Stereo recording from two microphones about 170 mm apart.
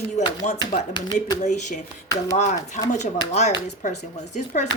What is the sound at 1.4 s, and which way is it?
Speech, 45° left (ahead or behind).